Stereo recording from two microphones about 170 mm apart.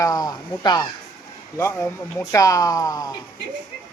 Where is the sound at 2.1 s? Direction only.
20° left (ahead or behind).